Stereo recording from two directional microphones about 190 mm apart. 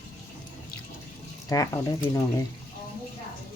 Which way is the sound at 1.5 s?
20° left (ahead or behind).